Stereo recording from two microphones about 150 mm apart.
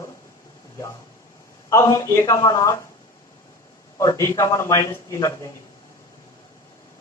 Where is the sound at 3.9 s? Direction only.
20° left (ahead or behind).